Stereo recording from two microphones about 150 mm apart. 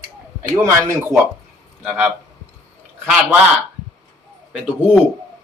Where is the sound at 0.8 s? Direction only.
20° right (ahead or behind).